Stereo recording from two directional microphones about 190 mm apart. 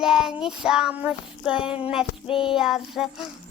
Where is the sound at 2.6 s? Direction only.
Centre (ahead or behind).